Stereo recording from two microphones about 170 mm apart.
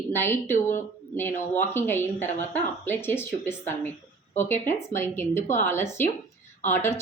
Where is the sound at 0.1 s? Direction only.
15° left (ahead or behind).